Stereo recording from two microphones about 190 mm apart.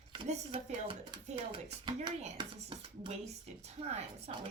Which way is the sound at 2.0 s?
25° right (ahead or behind).